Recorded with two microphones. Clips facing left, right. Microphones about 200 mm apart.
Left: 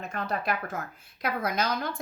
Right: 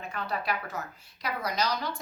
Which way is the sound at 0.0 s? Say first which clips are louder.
Left 2 dB; 45° left (ahead or behind).